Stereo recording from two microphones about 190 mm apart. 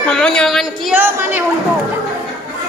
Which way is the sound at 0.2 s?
5° left (ahead or behind).